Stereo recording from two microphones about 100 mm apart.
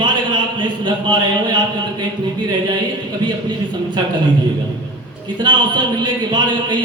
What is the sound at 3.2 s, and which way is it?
Speech, 50° right (ahead or behind).